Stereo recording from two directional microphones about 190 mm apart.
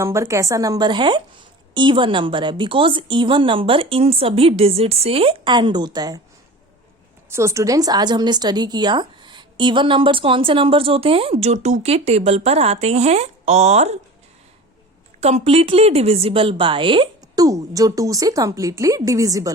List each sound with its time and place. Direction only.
0.0 s a woman's voice: 15° right (ahead or behind)
7.3 s a woman's voice: 15° right (ahead or behind); by 13.9 s 35° right (ahead or behind)
15.2 s a woman's voice: 35° right (ahead or behind); by 19.5 s 15° right (ahead or behind)